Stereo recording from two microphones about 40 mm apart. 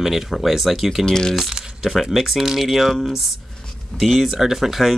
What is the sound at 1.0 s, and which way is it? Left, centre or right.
Speech, centre.